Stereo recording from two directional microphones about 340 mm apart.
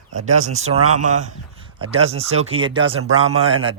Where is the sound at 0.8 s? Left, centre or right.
Right.